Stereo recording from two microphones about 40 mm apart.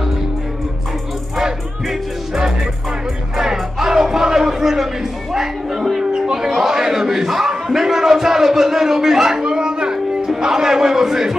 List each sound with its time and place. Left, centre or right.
1.4 s music: centre
6.1 s a sound: centre
10.2 s a man's voice: centre